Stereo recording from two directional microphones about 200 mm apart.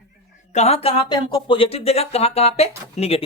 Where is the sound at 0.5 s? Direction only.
30° left (ahead or behind).